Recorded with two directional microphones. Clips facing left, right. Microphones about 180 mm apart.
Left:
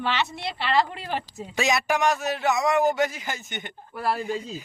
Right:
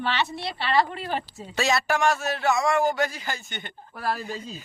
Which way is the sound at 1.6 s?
15° left (ahead or behind).